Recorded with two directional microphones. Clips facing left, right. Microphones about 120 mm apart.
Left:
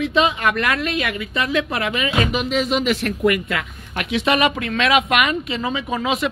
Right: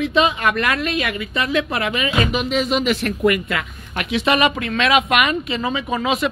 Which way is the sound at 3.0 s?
40° right (ahead or behind).